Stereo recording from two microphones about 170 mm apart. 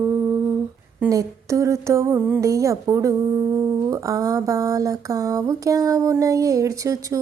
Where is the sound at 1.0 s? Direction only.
20° right (ahead or behind).